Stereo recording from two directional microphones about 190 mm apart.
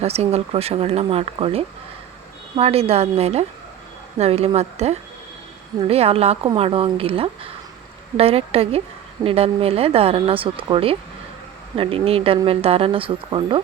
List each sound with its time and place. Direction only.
0.0 s speech: 35° right (ahead or behind)